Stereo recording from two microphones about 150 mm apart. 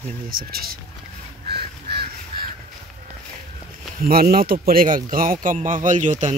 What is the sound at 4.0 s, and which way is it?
Speech, 75° right (ahead or behind).